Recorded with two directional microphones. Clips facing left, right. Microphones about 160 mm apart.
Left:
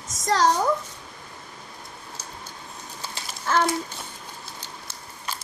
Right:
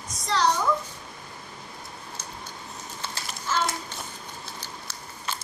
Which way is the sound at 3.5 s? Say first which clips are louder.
Left 5 dB; 60° left (ahead or behind).